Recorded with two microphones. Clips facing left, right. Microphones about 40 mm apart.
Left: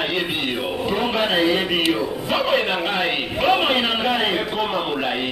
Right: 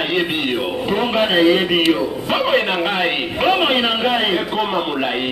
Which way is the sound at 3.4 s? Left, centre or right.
Centre.